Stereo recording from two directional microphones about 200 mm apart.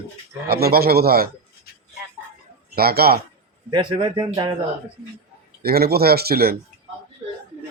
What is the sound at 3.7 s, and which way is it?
Speech, 25° right (ahead or behind).